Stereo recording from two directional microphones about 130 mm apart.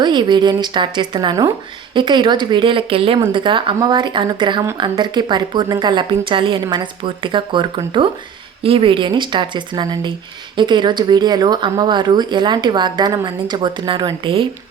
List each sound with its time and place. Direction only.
0.0 s a woman's voice: 35° right (ahead or behind)